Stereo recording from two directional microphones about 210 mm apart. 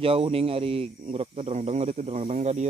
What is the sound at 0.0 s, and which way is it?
Speech, 25° right (ahead or behind).